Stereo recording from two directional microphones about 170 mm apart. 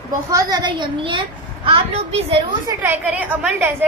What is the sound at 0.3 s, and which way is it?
A woman's voice, 20° right (ahead or behind).